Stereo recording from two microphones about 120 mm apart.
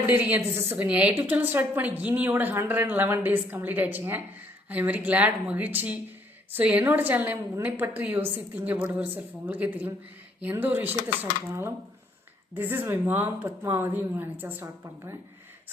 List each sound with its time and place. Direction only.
0.0 s a woman's voice: 15° right (ahead or behind)